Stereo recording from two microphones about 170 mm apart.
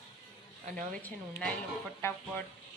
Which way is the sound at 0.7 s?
10° left (ahead or behind).